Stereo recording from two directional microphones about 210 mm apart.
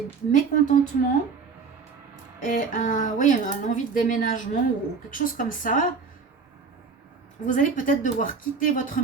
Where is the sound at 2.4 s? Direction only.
40° left (ahead or behind).